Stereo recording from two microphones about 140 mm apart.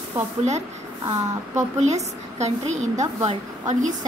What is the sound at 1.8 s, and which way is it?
A woman's voice, 55° right (ahead or behind).